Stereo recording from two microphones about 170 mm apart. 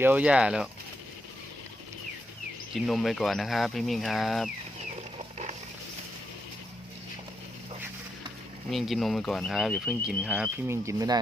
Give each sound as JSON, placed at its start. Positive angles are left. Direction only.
{"t": 0.0, "sound": "speech", "side_deg": -10}
{"t": 2.7, "sound": "speech", "side_deg": 0}
{"t": 8.7, "sound": "speech", "side_deg": 0}
{"t": 10.7, "sound": "speech", "side_deg": -20}